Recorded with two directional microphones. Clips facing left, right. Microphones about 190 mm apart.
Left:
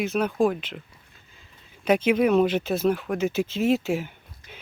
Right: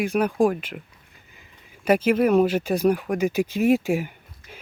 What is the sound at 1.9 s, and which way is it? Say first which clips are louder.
Speech: right 1 dB; 10° right (ahead or behind).